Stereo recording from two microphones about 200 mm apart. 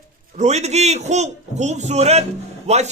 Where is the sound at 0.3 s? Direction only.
35° right (ahead or behind).